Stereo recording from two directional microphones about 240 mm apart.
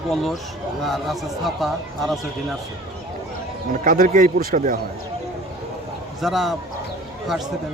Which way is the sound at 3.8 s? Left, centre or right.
Right.